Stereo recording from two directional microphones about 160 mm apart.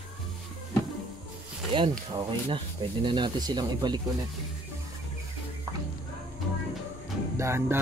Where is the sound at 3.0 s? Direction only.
30° right (ahead or behind).